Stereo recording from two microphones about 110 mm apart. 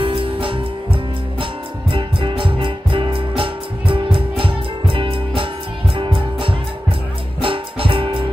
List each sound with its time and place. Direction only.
0.0 s music: 55° right (ahead or behind)